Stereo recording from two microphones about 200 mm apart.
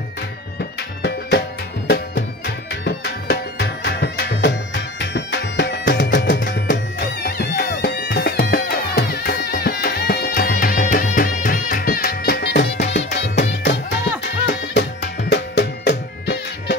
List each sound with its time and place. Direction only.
1.9 s music: 60° left (ahead or behind)